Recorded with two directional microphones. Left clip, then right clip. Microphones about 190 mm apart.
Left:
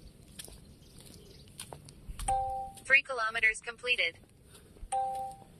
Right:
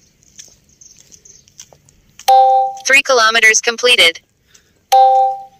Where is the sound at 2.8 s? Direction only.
45° right (ahead or behind).